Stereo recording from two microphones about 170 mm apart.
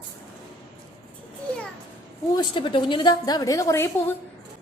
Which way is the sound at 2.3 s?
25° left (ahead or behind).